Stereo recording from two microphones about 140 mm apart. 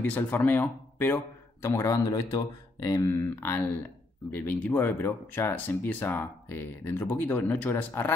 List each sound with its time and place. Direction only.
0.0 s speech: 10° left (ahead or behind)